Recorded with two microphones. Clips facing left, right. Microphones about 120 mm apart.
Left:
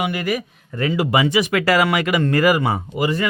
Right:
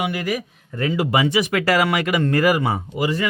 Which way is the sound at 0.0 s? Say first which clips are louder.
Left 1 dB; 60° left (ahead or behind).